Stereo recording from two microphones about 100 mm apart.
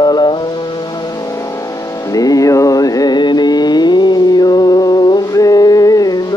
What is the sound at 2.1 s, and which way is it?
Music, 35° left (ahead or behind).